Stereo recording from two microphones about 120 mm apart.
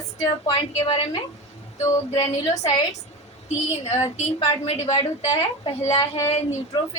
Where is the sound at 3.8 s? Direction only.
60° left (ahead or behind).